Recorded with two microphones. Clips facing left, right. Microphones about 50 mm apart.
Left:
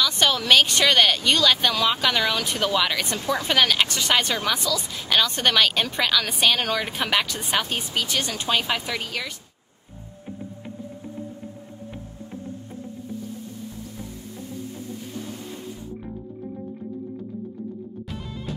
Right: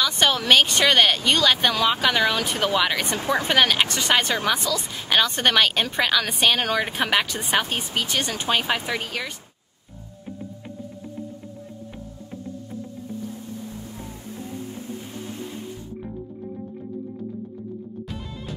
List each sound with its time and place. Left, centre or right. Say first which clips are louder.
0.0 s speech: right 1 dB; centre
3.2 s speech: right 3 dB; right
3.4 s speech: even; centre